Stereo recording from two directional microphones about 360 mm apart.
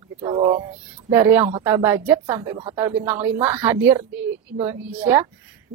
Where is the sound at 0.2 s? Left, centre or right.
Centre.